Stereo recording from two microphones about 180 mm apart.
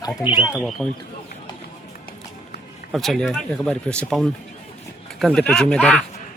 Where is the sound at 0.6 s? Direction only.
Centre (ahead or behind).